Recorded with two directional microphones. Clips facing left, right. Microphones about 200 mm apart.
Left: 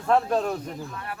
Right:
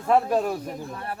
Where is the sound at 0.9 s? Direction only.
35° right (ahead or behind).